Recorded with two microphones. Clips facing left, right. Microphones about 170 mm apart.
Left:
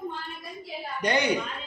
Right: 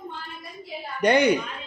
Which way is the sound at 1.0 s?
55° right (ahead or behind).